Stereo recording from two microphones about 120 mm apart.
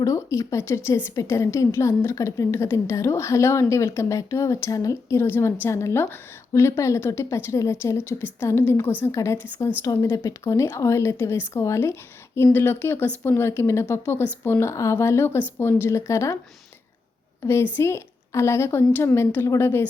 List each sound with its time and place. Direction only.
0.0 s a woman's voice: 25° left (ahead or behind)
17.4 s a woman's voice: 20° left (ahead or behind)